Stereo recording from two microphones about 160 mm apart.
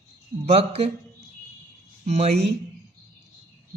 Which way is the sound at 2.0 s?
40° right (ahead or behind).